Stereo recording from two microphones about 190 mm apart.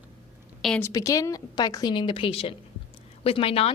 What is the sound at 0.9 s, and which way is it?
A woman's voice, 15° left (ahead or behind).